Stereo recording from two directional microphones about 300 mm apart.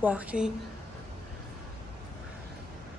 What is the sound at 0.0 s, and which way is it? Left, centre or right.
Speech, centre.